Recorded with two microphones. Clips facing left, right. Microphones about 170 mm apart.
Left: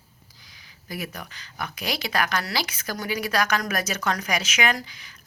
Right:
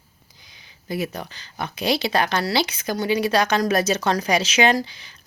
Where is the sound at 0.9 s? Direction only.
25° right (ahead or behind).